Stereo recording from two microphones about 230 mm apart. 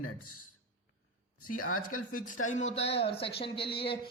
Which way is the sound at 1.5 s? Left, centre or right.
Left.